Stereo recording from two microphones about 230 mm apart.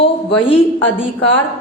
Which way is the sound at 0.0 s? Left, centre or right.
Left.